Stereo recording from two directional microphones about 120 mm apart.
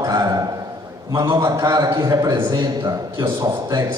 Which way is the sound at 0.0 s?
30° right (ahead or behind).